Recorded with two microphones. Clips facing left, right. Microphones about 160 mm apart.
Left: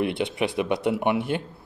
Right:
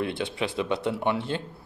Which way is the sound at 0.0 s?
20° left (ahead or behind).